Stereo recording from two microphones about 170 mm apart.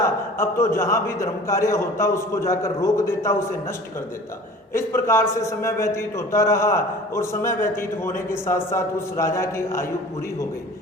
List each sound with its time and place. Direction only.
0.3 s a man's voice: 15° left (ahead or behind)
4.7 s a man's voice: 15° left (ahead or behind)